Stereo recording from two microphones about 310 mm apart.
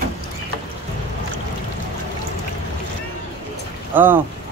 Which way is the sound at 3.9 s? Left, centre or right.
Centre.